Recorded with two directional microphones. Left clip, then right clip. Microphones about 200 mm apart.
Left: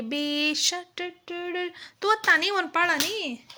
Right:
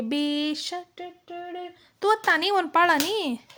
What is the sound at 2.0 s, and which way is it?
A child's voice, 15° right (ahead or behind).